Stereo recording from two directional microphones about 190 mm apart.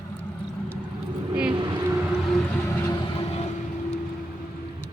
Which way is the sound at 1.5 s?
25° right (ahead or behind).